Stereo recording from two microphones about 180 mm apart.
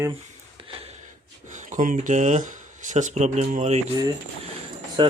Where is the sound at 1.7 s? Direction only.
50° right (ahead or behind).